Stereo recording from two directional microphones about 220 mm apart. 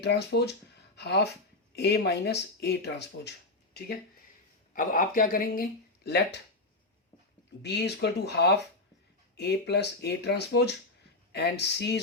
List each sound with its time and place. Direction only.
0.0 s speech: 50° left (ahead or behind)
4.7 s speech: 40° left (ahead or behind)
7.6 s speech: 50° left (ahead or behind)